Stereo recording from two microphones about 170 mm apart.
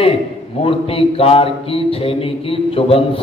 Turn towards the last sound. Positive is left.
turn(degrees=35)  # may be behind; listen again after turning